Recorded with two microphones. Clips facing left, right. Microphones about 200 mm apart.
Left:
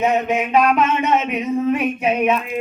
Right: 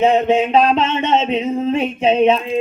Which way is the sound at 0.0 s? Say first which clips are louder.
Right 5 dB; 30° right (ahead or behind).